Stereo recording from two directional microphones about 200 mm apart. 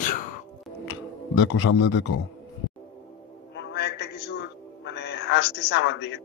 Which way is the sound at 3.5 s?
55° left (ahead or behind).